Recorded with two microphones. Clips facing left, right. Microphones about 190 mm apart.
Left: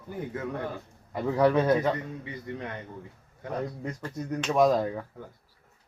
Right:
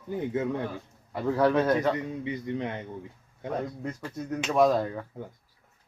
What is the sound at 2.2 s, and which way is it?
Speech, 20° right (ahead or behind).